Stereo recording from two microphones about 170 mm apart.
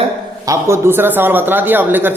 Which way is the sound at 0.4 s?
15° right (ahead or behind).